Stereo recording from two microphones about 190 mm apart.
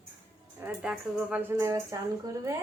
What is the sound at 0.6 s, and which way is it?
A woman's voice, 10° right (ahead or behind).